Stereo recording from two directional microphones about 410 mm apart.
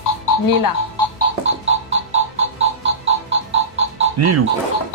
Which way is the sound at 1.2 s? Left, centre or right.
Right.